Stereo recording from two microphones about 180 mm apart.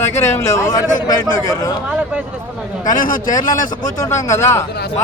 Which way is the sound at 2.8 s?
50° left (ahead or behind).